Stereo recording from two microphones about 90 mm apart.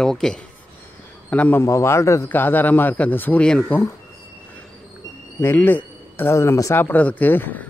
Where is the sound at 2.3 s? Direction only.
20° left (ahead or behind).